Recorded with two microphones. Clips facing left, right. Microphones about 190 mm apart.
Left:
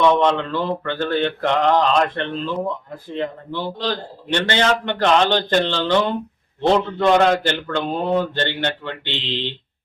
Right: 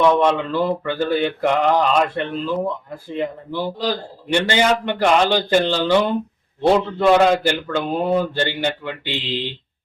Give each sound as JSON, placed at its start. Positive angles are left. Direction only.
{"t": 0.0, "sound": "a man's voice", "side_deg": -10}